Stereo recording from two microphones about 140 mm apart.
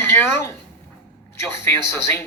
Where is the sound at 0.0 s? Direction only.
15° left (ahead or behind).